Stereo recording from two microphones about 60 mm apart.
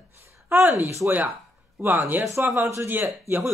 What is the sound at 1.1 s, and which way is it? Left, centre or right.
Speech, right.